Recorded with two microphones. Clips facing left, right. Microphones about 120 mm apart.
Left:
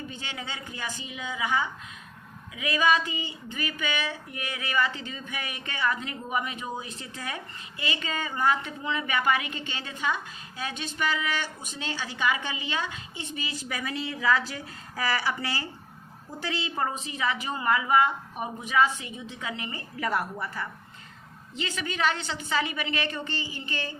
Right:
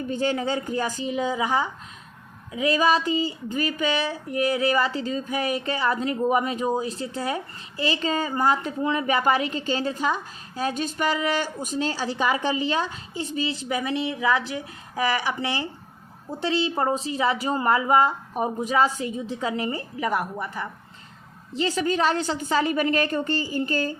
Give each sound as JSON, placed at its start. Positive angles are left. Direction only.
{"t": 0.1, "sound": "speech", "side_deg": -40}
{"t": 20.0, "sound": "a woman's voice", "side_deg": -15}
{"t": 21.5, "sound": "speech", "side_deg": -35}